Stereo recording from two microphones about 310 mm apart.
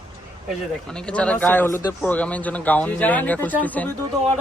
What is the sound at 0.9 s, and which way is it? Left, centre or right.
Speech, centre.